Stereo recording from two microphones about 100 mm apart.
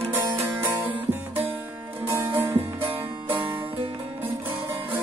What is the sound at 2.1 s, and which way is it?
Music, 25° right (ahead or behind).